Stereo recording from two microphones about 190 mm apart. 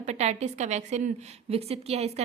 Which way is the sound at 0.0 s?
35° right (ahead or behind).